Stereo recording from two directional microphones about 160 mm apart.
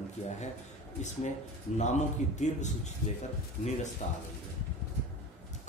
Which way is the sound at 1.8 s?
45° left (ahead or behind).